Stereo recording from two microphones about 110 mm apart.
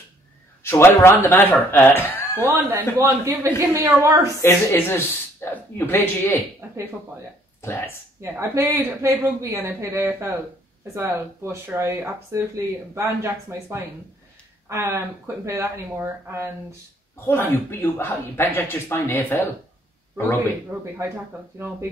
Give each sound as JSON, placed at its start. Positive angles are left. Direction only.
{"t": 0.7, "sound": "speech", "side_deg": 25}
{"t": 2.4, "sound": "speech", "side_deg": -20}
{"t": 4.4, "sound": "speech", "side_deg": 25}
{"t": 6.6, "sound": "speech", "side_deg": -15}
{"t": 8.2, "sound": "speech", "side_deg": -25}
{"t": 17.3, "sound": "speech", "side_deg": 20}